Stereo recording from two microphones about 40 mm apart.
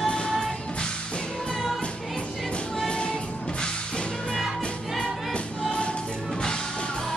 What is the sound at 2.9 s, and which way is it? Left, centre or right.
Music, left.